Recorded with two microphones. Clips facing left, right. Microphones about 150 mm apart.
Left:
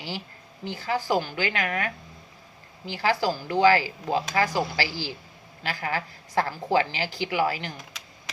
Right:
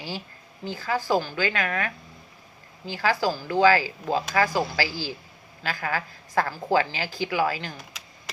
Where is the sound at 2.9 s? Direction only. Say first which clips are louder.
Even; 20° left (ahead or behind).